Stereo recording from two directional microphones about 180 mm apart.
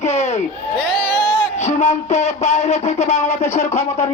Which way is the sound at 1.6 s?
40° left (ahead or behind).